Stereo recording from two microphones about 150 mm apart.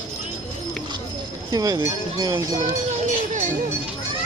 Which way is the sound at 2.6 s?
55° right (ahead or behind).